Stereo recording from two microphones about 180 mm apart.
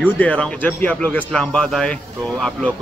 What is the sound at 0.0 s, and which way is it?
A man's voice, 10° left (ahead or behind).